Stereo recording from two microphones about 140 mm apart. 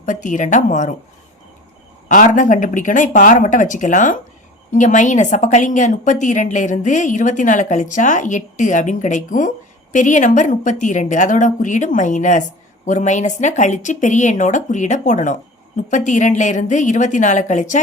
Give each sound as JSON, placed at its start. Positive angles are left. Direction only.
{"t": 0.0, "sound": "a woman's voice", "side_deg": 65}
{"t": 2.0, "sound": "a woman's voice", "side_deg": 65}